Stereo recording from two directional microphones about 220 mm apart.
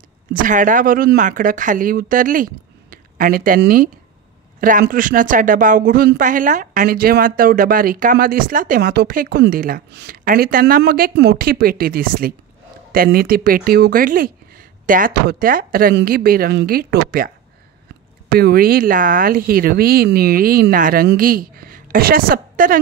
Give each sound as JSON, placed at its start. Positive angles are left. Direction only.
{"t": 0.3, "sound": "speech", "side_deg": -35}
{"t": 18.3, "sound": "speech", "side_deg": -45}